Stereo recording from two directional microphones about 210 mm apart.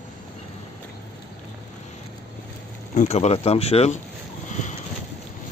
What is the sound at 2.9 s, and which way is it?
Speech, 30° left (ahead or behind).